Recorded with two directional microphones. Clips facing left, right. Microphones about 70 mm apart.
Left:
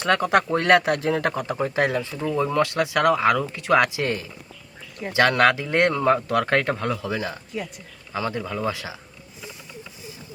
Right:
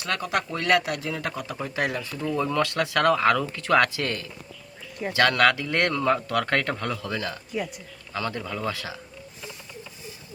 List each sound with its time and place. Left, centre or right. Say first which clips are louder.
0.3 s speech: left 4 dB; left; by 9.0 s centre